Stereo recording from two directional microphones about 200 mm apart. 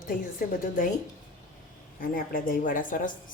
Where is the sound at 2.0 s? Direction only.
45° left (ahead or behind).